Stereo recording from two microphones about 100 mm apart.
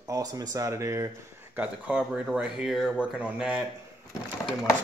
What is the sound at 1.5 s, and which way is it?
Speech, 10° right (ahead or behind).